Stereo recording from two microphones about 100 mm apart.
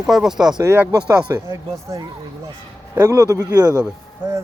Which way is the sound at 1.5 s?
35° right (ahead or behind).